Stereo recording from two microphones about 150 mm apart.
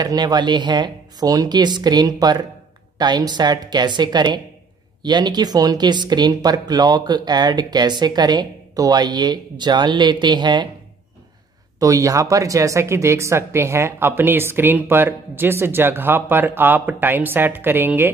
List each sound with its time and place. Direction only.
0.0 s speech: 25° right (ahead or behind)
11.8 s speech: 20° right (ahead or behind)